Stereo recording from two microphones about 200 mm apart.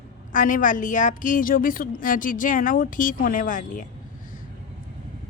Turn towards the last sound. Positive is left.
turn(degrees=40)  # may be behind; listen again after turning